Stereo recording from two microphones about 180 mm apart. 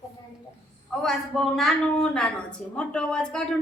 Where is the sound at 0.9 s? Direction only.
Centre (ahead or behind).